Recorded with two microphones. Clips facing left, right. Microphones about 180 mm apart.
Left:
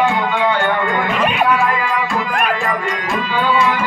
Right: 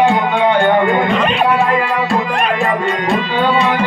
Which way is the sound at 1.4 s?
25° right (ahead or behind).